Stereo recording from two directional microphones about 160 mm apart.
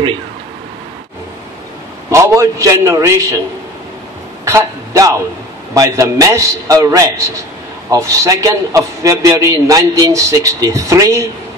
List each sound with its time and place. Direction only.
2.0 s a man's voice: 15° right (ahead or behind)
4.5 s a sound: 20° right (ahead or behind)
5.8 s a man's voice: 20° right (ahead or behind)